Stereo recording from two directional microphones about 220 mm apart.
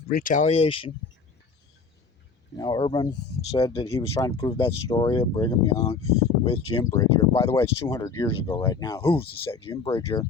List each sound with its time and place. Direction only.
0.1 s speech: 40° left (ahead or behind)
2.6 s speech: 20° left (ahead or behind)
4.1 s speech: 15° left (ahead or behind)
6.9 s speech: 15° left (ahead or behind)